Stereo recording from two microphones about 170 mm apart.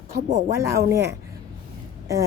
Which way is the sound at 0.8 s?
15° right (ahead or behind).